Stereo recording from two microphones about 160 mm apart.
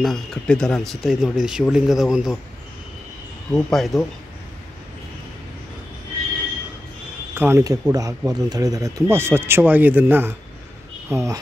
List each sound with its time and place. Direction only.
0.0 s speech: centre (ahead or behind)
3.5 s speech: centre (ahead or behind)
7.3 s speech: 15° right (ahead or behind)